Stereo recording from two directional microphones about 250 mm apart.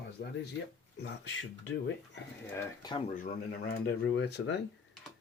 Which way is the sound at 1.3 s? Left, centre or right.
Left.